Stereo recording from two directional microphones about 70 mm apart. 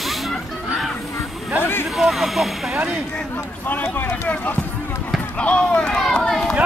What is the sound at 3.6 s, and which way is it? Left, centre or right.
Speech, left.